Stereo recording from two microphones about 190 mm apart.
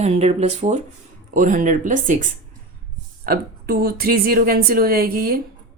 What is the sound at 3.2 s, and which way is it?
A woman's voice, 55° right (ahead or behind).